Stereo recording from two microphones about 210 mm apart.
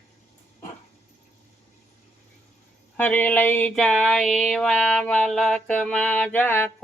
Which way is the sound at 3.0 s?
10° left (ahead or behind).